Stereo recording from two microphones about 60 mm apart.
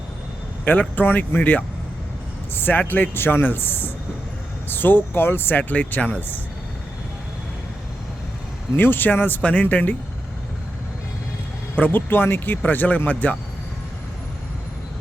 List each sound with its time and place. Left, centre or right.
0.6 s speech: left
2.6 s speech: left
8.7 s speech: left
11.8 s speech: left